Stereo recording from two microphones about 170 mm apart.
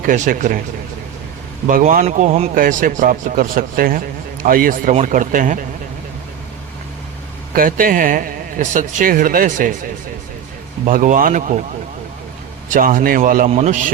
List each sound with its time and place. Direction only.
0.0 s speech: 55° right (ahead or behind)
1.6 s speech: 50° right (ahead or behind)
2.6 s a man's voice: 55° right (ahead or behind)
7.5 s a man's voice: 55° right (ahead or behind)
10.8 s speech: 50° right (ahead or behind)
12.6 s speech: 50° right (ahead or behind)
13.5 s speech: 45° right (ahead or behind)